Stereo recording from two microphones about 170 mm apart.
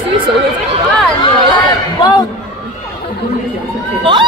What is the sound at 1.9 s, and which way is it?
Speech, 25° left (ahead or behind).